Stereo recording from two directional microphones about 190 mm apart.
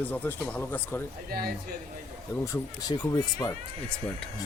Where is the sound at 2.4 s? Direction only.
20° left (ahead or behind).